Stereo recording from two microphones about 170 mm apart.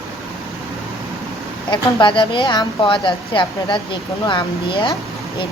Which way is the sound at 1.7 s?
30° left (ahead or behind).